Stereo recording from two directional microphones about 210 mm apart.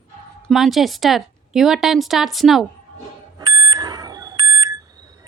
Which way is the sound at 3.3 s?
15° right (ahead or behind).